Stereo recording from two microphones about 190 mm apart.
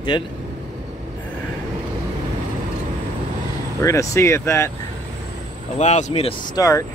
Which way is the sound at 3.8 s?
15° left (ahead or behind).